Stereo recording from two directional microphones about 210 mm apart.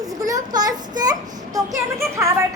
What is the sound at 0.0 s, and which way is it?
A child's voice, 15° right (ahead or behind).